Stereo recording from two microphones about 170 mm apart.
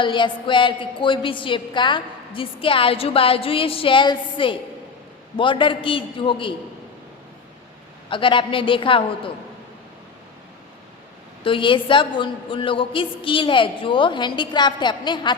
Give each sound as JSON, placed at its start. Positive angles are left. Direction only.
{"t": 0.0, "sound": "a woman's voice", "side_deg": 30}
{"t": 8.1, "sound": "a woman's voice", "side_deg": 30}
{"t": 11.4, "sound": "a woman's voice", "side_deg": 30}